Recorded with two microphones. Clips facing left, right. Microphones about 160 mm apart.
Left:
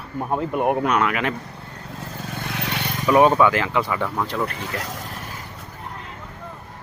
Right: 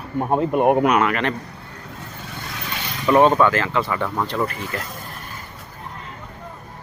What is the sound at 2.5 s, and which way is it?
Vehicle, 65° left (ahead or behind).